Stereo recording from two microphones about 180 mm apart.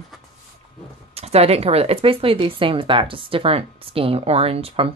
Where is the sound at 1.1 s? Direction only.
35° right (ahead or behind).